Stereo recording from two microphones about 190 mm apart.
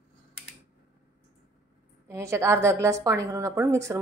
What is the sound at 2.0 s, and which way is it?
A woman's voice, 15° right (ahead or behind).